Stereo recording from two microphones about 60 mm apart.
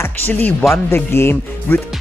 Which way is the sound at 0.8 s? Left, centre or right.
Left.